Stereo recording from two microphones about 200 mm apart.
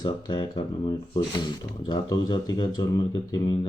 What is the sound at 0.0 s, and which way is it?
Speech, 20° left (ahead or behind).